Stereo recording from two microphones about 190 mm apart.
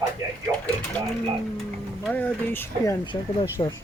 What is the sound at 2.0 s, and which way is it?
Speech, 10° left (ahead or behind).